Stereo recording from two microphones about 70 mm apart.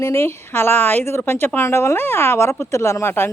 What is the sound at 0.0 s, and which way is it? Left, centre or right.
A woman's voice, left.